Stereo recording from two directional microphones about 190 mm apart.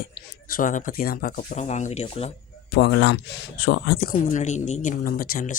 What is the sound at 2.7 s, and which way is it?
Speech, 65° left (ahead or behind).